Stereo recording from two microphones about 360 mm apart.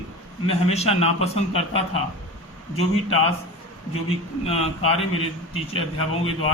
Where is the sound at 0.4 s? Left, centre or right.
Centre.